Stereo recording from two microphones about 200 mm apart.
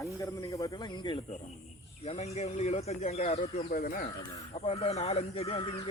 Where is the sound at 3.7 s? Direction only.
45° left (ahead or behind).